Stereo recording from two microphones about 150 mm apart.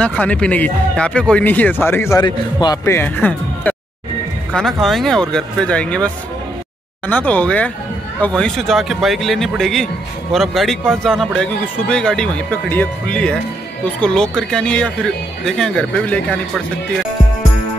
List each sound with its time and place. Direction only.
0.0 s speech: 10° left (ahead or behind)
2.2 s a man's voice: 30° left (ahead or behind)
2.8 s speech: 15° left (ahead or behind)